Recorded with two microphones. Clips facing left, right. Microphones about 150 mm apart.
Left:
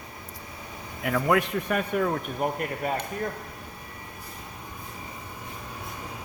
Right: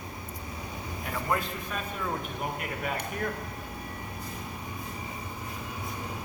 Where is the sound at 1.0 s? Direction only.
80° left.